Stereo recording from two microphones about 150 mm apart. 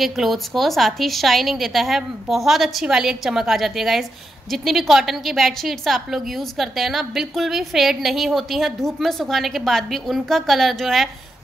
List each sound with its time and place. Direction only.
0.0 s a woman's voice: centre (ahead or behind)